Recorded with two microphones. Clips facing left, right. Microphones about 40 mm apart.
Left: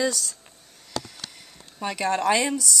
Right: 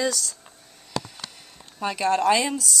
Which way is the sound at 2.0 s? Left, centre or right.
Left.